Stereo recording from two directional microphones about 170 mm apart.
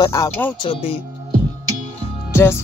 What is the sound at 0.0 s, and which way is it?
Speech, 20° left (ahead or behind).